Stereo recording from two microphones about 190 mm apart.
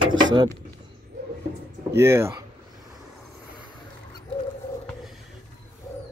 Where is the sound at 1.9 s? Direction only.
15° right (ahead or behind).